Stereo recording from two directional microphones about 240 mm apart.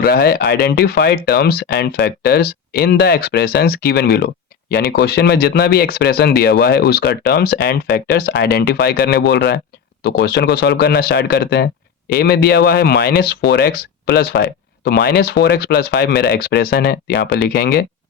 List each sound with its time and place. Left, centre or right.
0.0 s speech: left